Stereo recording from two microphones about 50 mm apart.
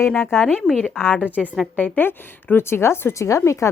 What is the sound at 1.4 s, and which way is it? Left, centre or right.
Speech, centre.